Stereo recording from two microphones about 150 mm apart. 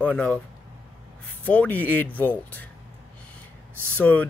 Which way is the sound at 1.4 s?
10° left (ahead or behind).